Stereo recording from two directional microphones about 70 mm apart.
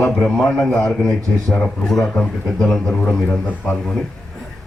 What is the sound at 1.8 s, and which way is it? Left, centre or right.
A man's voice, centre.